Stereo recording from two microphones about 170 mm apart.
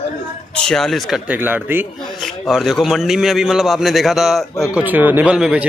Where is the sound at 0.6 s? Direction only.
5° left (ahead or behind).